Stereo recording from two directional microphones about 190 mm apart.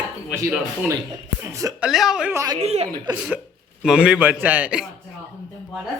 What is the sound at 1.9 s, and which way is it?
Speech, centre (ahead or behind).